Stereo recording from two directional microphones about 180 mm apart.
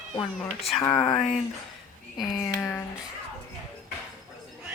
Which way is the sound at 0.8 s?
15° left (ahead or behind).